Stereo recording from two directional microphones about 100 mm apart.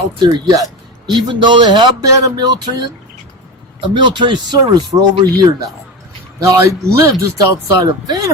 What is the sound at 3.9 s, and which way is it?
Speech, 50° right (ahead or behind).